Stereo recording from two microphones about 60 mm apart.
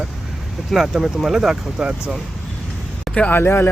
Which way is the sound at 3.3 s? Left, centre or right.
Left.